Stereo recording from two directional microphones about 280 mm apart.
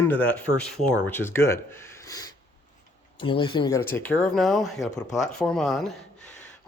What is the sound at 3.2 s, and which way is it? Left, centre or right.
Speech, centre.